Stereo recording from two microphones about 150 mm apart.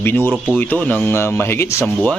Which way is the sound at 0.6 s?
10° left (ahead or behind).